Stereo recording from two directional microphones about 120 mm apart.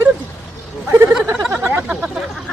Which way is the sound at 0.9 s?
25° right (ahead or behind).